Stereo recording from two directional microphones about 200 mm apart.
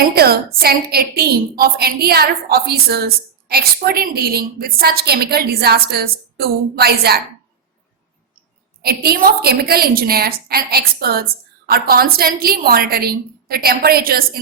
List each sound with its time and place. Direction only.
0.1 s a woman's voice: 50° right (ahead or behind)
8.8 s a woman's voice: 50° right (ahead or behind)